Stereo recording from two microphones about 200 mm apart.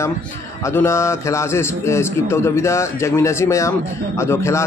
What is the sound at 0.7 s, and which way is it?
A man's voice, 15° left (ahead or behind).